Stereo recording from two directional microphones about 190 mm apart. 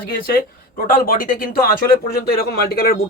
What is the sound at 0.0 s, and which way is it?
Speech, 50° left (ahead or behind).